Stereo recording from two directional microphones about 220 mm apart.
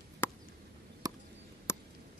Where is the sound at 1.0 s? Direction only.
15° right (ahead or behind).